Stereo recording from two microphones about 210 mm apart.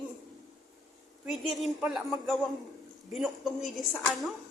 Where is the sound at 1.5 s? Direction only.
Centre (ahead or behind).